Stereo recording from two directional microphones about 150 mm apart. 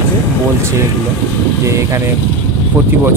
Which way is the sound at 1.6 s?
20° right (ahead or behind).